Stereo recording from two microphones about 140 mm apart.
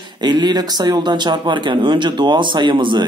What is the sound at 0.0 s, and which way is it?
Speech, 30° right (ahead or behind).